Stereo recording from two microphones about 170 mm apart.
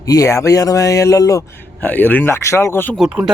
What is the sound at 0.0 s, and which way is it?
Speech, 20° left (ahead or behind).